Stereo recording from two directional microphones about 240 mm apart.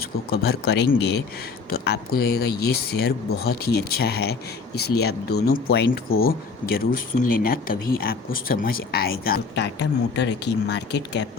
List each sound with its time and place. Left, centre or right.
0.3 s speech: left